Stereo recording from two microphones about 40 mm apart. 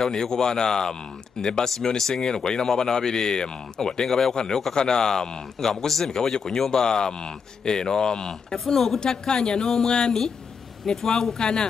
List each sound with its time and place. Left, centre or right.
0.0 s speech: centre